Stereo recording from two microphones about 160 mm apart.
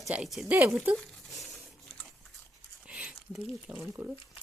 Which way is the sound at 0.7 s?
Centre (ahead or behind).